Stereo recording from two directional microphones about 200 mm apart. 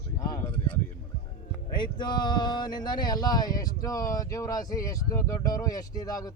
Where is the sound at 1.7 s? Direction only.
20° left (ahead or behind).